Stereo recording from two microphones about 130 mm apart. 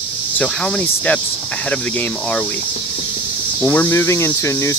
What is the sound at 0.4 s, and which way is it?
Speech, 10° left (ahead or behind).